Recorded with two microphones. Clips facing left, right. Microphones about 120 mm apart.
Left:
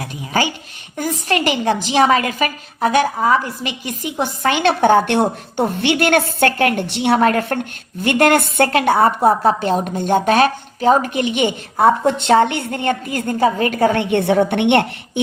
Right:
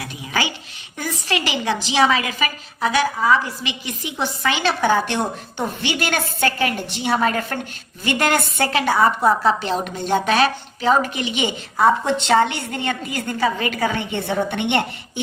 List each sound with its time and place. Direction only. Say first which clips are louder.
0.0 s a woman's voice: left 4 dB; 45° left (ahead or behind)
13.9 s a woman's voice: left 8 dB; 65° left (ahead or behind)